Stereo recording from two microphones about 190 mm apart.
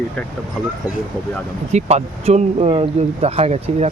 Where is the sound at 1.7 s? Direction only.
35° right (ahead or behind).